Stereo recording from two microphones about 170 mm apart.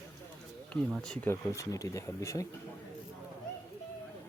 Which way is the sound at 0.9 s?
Centre (ahead or behind).